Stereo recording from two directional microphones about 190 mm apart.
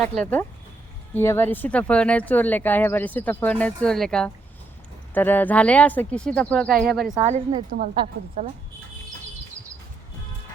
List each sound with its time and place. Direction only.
0.2 s speech: 10° left (ahead or behind)
7.2 s a woman's voice: 35° right (ahead or behind)